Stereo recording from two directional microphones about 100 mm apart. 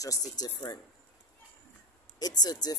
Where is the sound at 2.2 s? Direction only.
40° left (ahead or behind).